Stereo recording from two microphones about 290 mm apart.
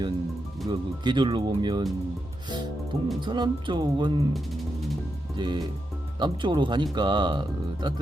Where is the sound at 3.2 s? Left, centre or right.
Centre.